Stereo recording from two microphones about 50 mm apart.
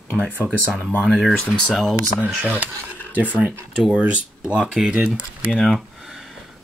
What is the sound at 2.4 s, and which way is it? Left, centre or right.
Speech, right.